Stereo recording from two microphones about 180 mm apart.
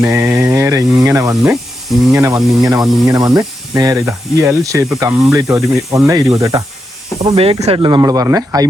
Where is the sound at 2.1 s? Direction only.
20° right (ahead or behind).